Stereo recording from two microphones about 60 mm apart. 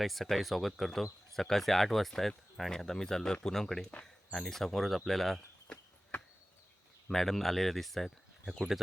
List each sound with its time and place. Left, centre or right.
0.0 s speech: centre
5.7 s cricket: left
7.1 s speech: centre